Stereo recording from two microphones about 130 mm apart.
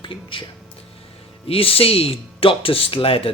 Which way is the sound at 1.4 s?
45° left (ahead or behind).